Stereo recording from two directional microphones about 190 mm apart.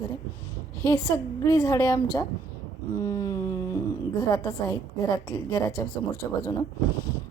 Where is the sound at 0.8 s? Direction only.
15° left (ahead or behind).